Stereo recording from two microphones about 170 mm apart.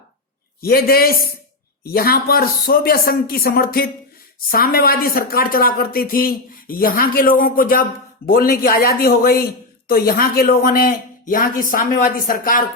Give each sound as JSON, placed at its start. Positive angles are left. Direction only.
{"t": 0.6, "sound": "speech", "side_deg": 60}